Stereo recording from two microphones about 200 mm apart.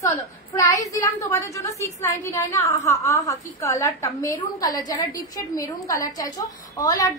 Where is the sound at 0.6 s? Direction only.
15° left (ahead or behind).